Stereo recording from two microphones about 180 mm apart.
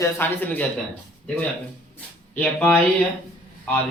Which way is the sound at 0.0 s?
10° left (ahead or behind).